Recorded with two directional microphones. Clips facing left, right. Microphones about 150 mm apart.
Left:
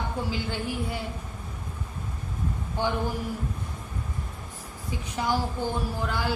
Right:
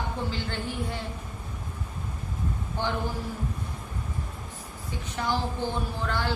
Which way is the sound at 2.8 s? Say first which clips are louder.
Left 3 dB; 15° left (ahead or behind).